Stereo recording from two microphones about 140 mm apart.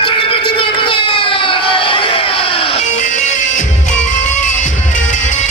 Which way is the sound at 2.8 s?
60° left (ahead or behind).